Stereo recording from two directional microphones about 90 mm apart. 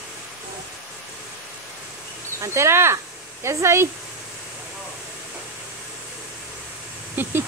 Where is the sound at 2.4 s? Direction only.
30° right (ahead or behind).